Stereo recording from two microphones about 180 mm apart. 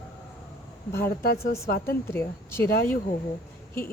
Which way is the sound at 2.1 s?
15° left (ahead or behind).